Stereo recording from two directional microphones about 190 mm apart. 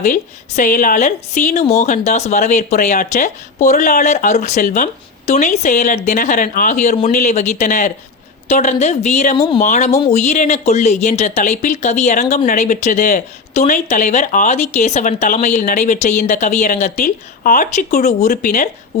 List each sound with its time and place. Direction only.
0.0 s speech: 45° left (ahead or behind)